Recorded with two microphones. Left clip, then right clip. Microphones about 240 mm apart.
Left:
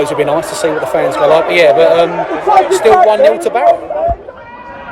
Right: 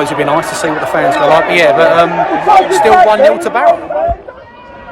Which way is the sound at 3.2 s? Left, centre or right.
Right.